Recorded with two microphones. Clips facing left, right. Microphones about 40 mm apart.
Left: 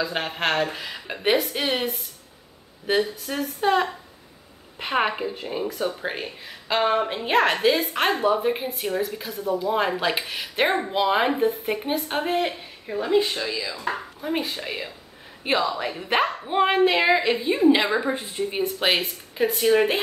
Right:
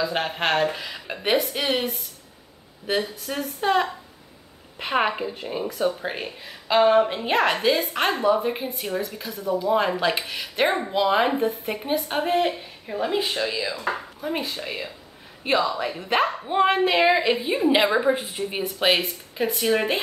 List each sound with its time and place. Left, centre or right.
0.0 s speech: centre
13.6 s speech: right
14.2 s speech: centre
18.5 s speech: centre